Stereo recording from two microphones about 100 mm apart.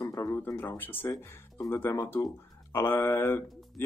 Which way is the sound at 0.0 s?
30° left (ahead or behind).